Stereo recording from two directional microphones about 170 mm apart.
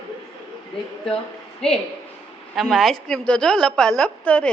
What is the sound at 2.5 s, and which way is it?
A woman's voice, centre (ahead or behind).